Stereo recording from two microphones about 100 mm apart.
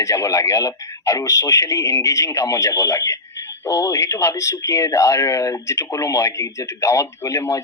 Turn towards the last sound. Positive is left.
turn(degrees=30)  # may be behind; listen again after turning